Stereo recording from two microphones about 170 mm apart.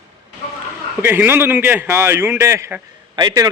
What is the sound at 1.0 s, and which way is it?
A man's voice, 10° right (ahead or behind).